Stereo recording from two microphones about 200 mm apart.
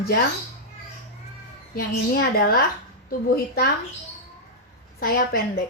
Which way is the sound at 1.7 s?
50° left (ahead or behind).